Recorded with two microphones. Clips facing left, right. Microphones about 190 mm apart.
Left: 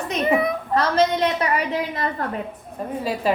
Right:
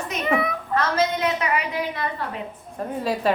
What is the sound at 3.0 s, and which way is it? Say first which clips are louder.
Speech: even; centre (ahead or behind).